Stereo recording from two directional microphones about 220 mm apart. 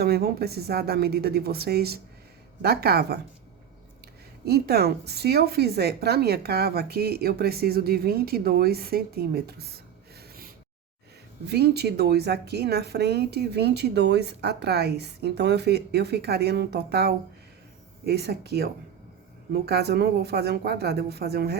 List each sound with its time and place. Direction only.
0.0 s speech: 45° right (ahead or behind)
4.4 s speech: 45° right (ahead or behind)
10.2 s snort: 40° right (ahead or behind)
11.4 s speech: 50° right (ahead or behind)